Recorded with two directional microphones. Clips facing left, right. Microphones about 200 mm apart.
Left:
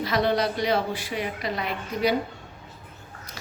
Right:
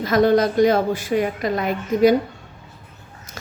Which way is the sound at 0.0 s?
45° right (ahead or behind).